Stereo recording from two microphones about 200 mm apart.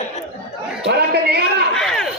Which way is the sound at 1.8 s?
Centre (ahead or behind).